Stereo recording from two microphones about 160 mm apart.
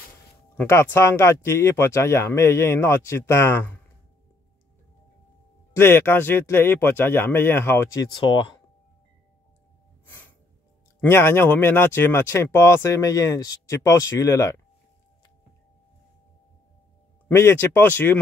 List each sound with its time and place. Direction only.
0.6 s speech: 15° left (ahead or behind)
5.7 s speech: 15° left (ahead or behind)
10.0 s music: 15° left (ahead or behind)
11.0 s speech: 15° left (ahead or behind)
17.3 s speech: 15° left (ahead or behind)